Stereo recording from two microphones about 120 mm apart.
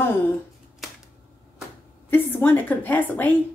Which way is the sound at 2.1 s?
15° left (ahead or behind).